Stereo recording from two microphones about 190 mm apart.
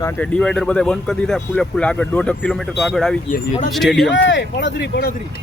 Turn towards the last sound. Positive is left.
turn(degrees=60)  # may be behind; listen again after turning